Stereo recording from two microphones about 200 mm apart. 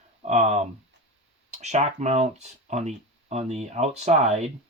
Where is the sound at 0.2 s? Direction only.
35° right (ahead or behind).